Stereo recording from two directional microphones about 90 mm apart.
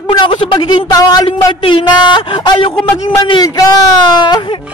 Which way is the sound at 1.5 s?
65° left (ahead or behind).